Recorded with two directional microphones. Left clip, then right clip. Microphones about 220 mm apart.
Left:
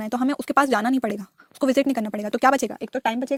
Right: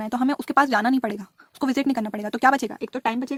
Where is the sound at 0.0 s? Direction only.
25° left (ahead or behind).